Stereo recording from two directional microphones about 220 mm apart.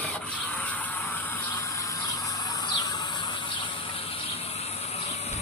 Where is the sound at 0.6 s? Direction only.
5° left (ahead or behind).